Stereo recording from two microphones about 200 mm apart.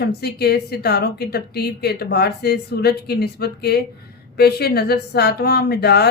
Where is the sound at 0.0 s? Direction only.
50° left (ahead or behind).